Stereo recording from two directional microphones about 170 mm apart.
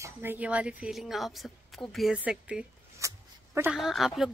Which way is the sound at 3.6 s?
Centre (ahead or behind).